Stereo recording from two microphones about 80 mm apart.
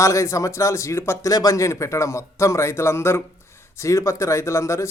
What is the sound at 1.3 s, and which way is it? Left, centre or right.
A man's voice, left.